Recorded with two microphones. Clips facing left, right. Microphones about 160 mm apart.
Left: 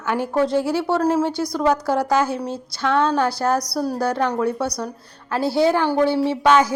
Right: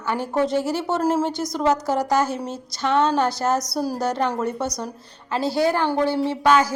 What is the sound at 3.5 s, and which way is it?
A woman's voice, 25° right (ahead or behind).